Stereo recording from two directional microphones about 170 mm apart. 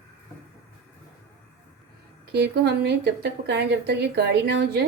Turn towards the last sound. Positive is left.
turn(degrees=-75)  # may be behind; listen again after turning